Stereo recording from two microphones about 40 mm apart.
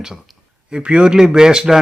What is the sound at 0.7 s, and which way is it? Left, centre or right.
Speech, right.